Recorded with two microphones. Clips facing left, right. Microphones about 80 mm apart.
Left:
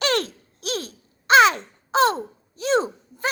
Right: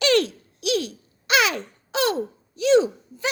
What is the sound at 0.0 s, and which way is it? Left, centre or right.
Babbling, left.